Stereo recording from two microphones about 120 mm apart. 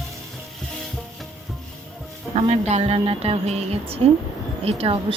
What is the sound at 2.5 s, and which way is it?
Speech, 65° right (ahead or behind).